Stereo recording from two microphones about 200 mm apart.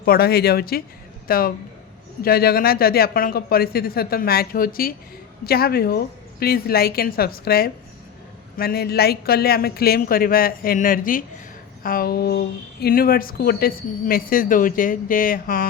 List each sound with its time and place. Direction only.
0.0 s speech: 50° left (ahead or behind)